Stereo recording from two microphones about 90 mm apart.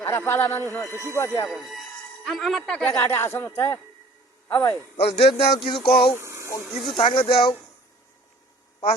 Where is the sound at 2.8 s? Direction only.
30° left (ahead or behind).